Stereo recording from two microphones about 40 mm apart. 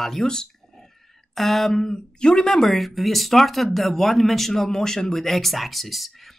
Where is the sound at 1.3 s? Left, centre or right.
Centre; by 2.4 s left.